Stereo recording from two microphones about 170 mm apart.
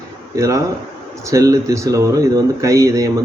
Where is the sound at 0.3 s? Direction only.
20° right (ahead or behind).